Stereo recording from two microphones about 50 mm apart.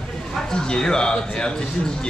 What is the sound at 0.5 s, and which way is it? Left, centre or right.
A man's voice, centre.